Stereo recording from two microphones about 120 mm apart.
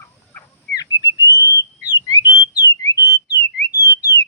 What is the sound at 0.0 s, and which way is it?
Bird, 15° left (ahead or behind).